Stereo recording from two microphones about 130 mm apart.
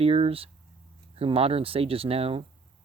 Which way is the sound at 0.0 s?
45° right (ahead or behind).